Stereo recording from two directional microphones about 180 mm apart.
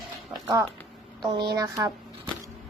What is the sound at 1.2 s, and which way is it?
Speech, 25° right (ahead or behind).